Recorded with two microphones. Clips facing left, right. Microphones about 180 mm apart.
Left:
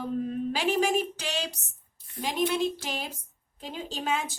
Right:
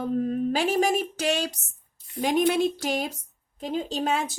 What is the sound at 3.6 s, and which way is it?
Speech, 40° right (ahead or behind).